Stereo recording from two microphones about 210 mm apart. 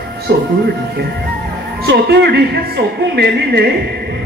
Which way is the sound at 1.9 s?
50° right (ahead or behind).